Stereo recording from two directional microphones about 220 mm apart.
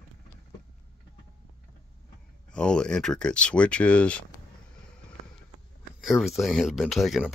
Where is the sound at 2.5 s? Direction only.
5° left (ahead or behind).